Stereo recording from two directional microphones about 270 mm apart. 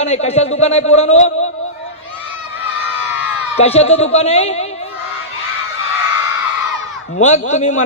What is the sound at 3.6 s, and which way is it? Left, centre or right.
A man's voice, left.